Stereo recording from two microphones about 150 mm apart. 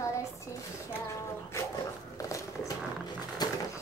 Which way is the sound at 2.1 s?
20° left (ahead or behind).